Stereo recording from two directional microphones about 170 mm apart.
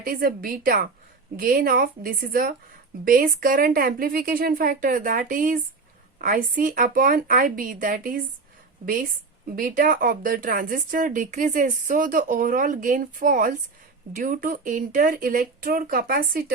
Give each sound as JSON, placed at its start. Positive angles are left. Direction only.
{"t": 0.0, "sound": "a woman's voice", "side_deg": -60}
{"t": 9.6, "sound": "speech", "side_deg": -55}